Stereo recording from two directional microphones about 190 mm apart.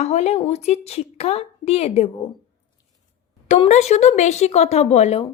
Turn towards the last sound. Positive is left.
turn(degrees=35)  # may be behind; listen again after turning